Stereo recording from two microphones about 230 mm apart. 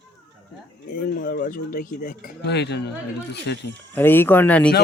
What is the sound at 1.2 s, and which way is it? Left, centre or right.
A man's voice, left.